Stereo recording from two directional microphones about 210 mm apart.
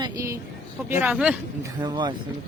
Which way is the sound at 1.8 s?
20° right (ahead or behind).